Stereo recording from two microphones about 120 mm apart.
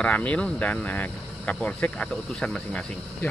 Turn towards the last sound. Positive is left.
turn(degrees=5)  # may be behind; listen again after turning